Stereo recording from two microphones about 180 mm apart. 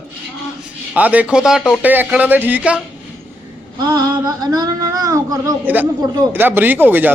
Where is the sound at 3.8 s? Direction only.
20° right (ahead or behind).